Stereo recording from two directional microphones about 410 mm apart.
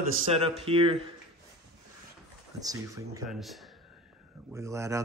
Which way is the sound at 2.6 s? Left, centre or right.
Centre.